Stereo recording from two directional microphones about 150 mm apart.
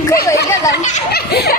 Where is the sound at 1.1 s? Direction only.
90° left.